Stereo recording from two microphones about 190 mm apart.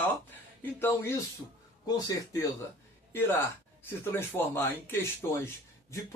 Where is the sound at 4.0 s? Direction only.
10° left (ahead or behind).